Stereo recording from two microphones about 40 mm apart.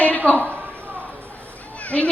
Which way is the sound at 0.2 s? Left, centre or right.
Left.